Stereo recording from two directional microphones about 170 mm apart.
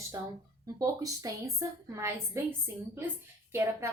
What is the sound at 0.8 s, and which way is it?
A woman's voice, 20° right (ahead or behind).